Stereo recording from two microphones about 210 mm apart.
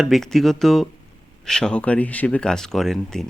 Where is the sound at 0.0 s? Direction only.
Centre (ahead or behind).